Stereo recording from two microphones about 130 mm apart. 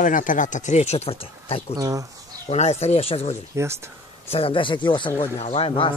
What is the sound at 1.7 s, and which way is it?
Speech, 25° right (ahead or behind).